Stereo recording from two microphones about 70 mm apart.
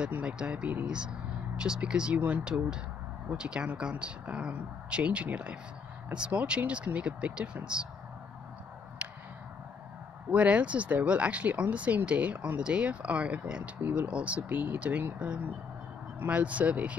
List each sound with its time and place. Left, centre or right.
0.0 s speech: right
10.3 s speech: centre